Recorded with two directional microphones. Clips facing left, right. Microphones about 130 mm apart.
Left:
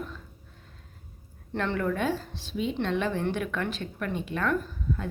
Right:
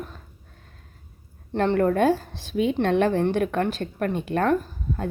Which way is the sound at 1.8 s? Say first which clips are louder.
Right 9 dB; 50° right (ahead or behind).